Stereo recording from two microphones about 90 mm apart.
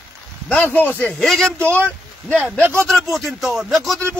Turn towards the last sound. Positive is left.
turn(degrees=0)  # may be behind; listen again after turning